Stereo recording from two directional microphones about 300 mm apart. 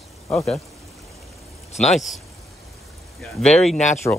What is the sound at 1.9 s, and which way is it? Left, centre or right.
Speech, centre.